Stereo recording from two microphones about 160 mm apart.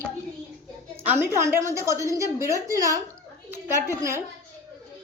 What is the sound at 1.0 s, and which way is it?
A woman's voice, 15° right (ahead or behind).